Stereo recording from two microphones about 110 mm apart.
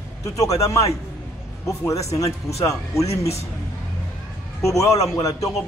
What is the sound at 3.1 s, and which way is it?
Speech, 70° left (ahead or behind).